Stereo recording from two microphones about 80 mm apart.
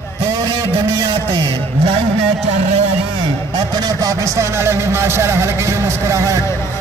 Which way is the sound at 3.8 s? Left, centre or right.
Right.